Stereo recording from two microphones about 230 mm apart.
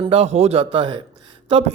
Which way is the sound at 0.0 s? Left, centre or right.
Right.